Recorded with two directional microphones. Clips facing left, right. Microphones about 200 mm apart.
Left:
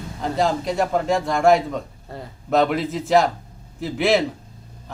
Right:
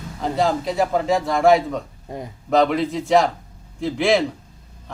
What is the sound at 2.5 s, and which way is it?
A man's voice, centre (ahead or behind).